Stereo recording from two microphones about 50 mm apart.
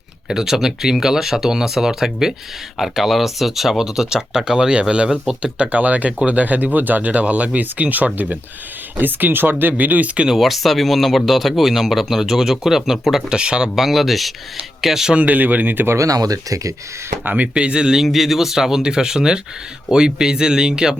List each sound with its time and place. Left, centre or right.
0.3 s speech: centre; by 10.2 s right
10.2 s speech: centre
13.4 s speech: centre
13.7 s speech: centre
15.1 s speech: right
17.2 s speech: right
17.5 s speech: right